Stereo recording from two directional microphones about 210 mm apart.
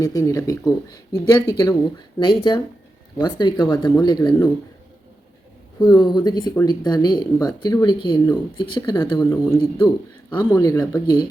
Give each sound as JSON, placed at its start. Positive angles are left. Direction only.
{"t": 0.0, "sound": "speech", "side_deg": 15}
{"t": 5.8, "sound": "speech", "side_deg": 20}